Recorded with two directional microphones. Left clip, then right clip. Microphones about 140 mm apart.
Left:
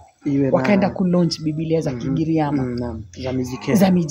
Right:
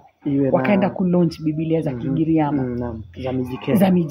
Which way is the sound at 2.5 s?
10° right (ahead or behind).